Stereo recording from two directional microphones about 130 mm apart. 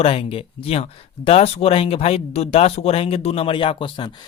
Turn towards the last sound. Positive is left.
turn(degrees=40)  # may be behind; listen again after turning